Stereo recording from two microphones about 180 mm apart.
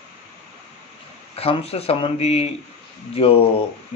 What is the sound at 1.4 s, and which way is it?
Speech, 35° left (ahead or behind).